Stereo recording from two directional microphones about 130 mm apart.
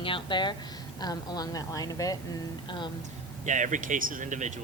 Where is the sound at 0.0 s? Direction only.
40° left (ahead or behind).